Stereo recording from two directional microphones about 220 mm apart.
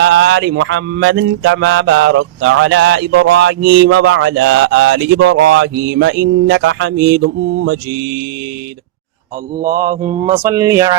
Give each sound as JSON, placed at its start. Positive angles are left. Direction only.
{"t": 0.0, "sound": "speech", "side_deg": -55}
{"t": 9.6, "sound": "mantra", "side_deg": -40}
{"t": 10.2, "sound": "speech", "side_deg": -15}